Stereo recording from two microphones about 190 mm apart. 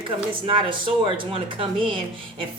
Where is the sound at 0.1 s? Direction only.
30° right (ahead or behind).